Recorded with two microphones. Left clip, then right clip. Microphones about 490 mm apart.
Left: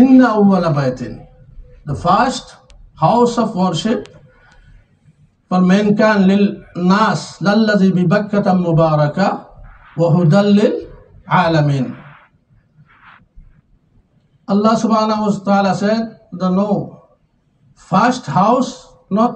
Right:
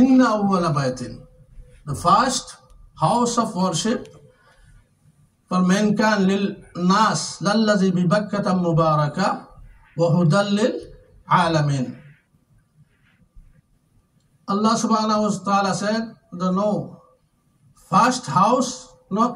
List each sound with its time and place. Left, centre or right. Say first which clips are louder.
0.0 s speech: left 6 dB; right
5.5 s speech: left 6 dB; right
14.4 s speech: left 6 dB; right
17.8 s speech: left 3 dB; right